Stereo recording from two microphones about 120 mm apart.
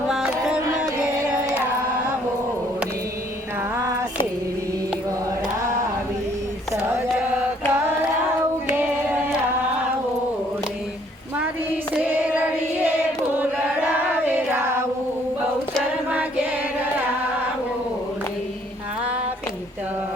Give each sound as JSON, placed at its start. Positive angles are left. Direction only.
{"t": 7.7, "sound": "carnatic music", "side_deg": -20}
{"t": 11.3, "sound": "child singing", "side_deg": -15}
{"t": 13.3, "sound": "choir", "side_deg": -15}